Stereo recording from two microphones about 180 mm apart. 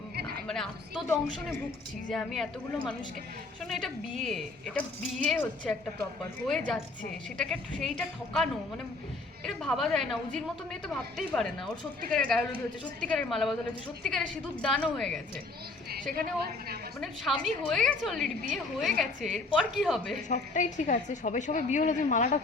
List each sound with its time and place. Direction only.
0.4 s a sound: 5° left (ahead or behind)
2.0 s a woman's voice: centre (ahead or behind)
3.7 s a woman's voice: centre (ahead or behind)
16.1 s a woman's voice: 60° right (ahead or behind)
17.0 s a woman's voice: centre (ahead or behind)
20.2 s a woman's voice: 45° left (ahead or behind)